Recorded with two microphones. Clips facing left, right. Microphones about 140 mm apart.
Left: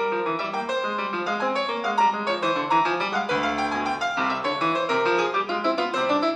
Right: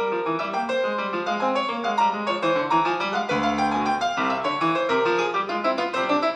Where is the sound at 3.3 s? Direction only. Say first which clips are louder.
Right 4 dB; 25° right (ahead or behind).